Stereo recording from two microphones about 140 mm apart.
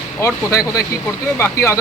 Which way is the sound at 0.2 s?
20° left (ahead or behind).